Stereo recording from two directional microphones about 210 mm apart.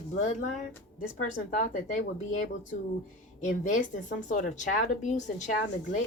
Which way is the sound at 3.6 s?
35° left (ahead or behind).